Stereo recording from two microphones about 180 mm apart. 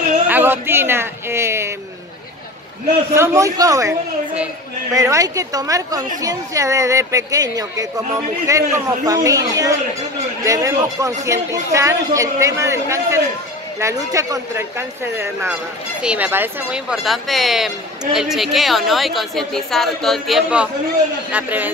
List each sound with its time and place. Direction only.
0.3 s a sound: 10° right (ahead or behind)
3.2 s a woman's voice: 15° right (ahead or behind)
4.9 s a woman's voice: 20° right (ahead or behind)